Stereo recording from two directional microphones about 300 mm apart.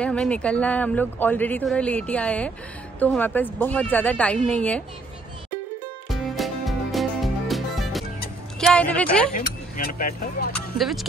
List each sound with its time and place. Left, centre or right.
0.0 s speech: centre
6.0 s music: centre
8.5 s speech: centre
9.8 s speech: left
10.5 s speech: centre